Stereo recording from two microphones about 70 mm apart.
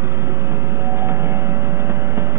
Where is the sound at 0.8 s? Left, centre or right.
Right.